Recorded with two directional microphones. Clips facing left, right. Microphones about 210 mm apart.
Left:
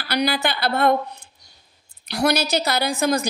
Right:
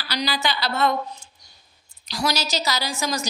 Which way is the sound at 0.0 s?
55° left (ahead or behind).